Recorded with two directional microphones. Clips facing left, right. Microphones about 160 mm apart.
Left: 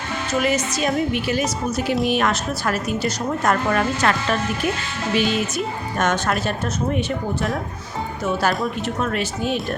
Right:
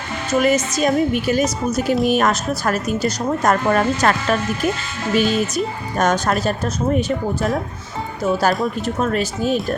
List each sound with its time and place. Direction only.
0.4 s a woman's voice: 45° right (ahead or behind)
8.2 s a woman's voice: 40° right (ahead or behind)